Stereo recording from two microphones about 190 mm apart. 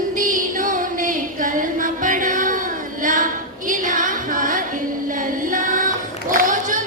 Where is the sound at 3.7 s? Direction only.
45° right (ahead or behind).